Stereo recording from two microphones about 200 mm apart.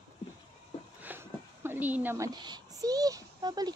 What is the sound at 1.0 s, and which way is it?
A woman's voice, 10° right (ahead or behind).